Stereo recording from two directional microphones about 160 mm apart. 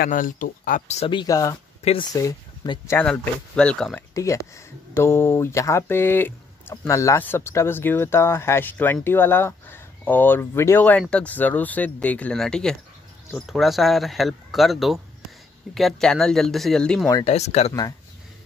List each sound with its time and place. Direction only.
0.0 s speech: 55° left (ahead or behind); by 1.6 s 20° left (ahead or behind)
1.8 s speech: 40° left (ahead or behind)
2.1 s speech: 25° left (ahead or behind)
2.9 s speech: 10° left (ahead or behind)
4.1 s speech: 20° left (ahead or behind); by 17.1 s 5° left (ahead or behind)
17.1 s speech: 35° left (ahead or behind)